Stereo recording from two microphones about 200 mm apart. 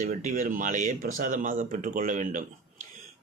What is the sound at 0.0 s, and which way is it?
A man's voice, 40° right (ahead or behind).